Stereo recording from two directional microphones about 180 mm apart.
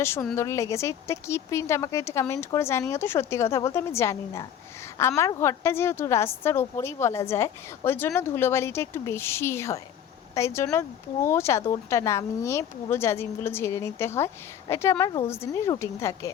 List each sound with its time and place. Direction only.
0.0 s a woman's voice: 15° left (ahead or behind)